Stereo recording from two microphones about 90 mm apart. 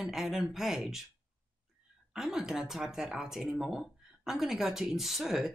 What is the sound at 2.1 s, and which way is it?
Speech, 5° right (ahead or behind).